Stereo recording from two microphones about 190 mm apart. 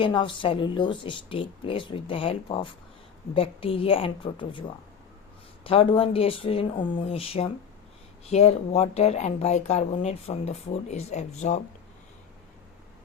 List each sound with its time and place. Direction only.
0.0 s speech: 25° left (ahead or behind)
5.6 s a woman's voice: 30° left (ahead or behind)